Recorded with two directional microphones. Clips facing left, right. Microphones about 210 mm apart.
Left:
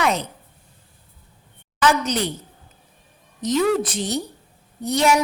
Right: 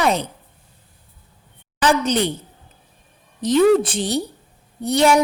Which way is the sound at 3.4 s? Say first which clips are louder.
Right 5 dB; 30° right (ahead or behind).